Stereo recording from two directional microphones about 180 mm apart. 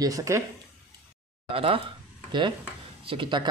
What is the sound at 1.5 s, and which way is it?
Speech, 30° right (ahead or behind).